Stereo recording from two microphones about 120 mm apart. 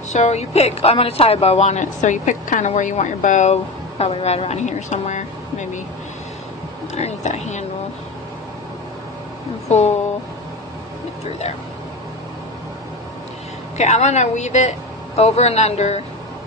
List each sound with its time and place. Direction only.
0.1 s a woman's voice: 70° left (ahead or behind); by 3.5 s 90° left
4.0 s a woman's voice: 60° left (ahead or behind); by 5.7 s 80° left
7.0 s a woman's voice: 65° left (ahead or behind)
9.7 s a woman's voice: 70° left (ahead or behind)
13.7 s a woman's voice: 70° left (ahead or behind)